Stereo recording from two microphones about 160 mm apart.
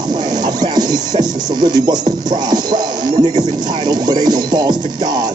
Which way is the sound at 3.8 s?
25° right (ahead or behind).